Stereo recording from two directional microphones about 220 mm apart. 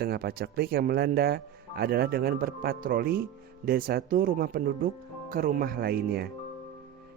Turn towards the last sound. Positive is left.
turn(degrees=-45)  # may be behind; listen again after turning